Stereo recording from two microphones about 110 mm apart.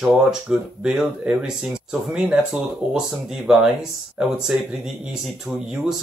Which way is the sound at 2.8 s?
90° right.